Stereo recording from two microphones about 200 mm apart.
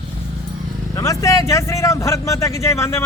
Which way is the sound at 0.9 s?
15° left (ahead or behind).